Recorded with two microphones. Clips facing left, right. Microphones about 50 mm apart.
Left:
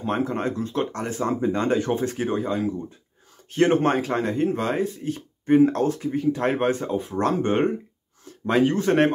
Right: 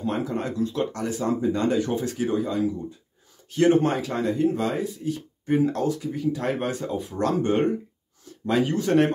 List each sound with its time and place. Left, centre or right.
0.0 s speech: left